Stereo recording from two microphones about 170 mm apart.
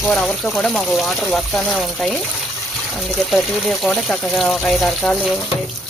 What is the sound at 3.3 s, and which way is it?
Speech, centre (ahead or behind).